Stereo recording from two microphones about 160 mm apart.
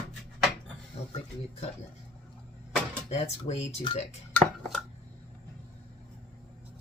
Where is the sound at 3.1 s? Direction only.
40° left (ahead or behind).